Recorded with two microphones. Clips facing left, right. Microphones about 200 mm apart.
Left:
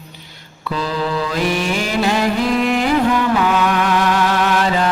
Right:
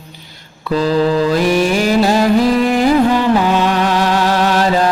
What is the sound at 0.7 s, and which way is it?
Mantra, 40° right (ahead or behind).